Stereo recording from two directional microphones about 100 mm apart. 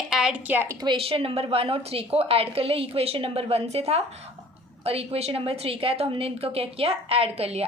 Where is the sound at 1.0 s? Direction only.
70° right (ahead or behind).